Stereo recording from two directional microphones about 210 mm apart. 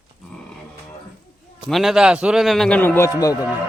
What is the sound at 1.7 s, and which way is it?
A man's voice, centre (ahead or behind).